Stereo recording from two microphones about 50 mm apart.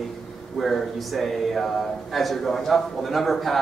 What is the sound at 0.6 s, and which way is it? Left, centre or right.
A man's voice, centre.